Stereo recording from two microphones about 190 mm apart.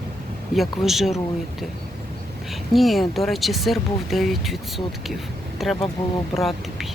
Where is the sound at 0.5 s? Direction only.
Centre (ahead or behind).